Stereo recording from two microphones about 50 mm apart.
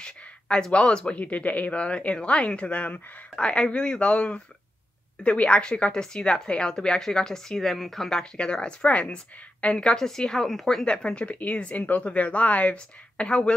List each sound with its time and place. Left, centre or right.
0.0 s speech: centre
3.3 s a woman's voice: centre
10.9 s speech: centre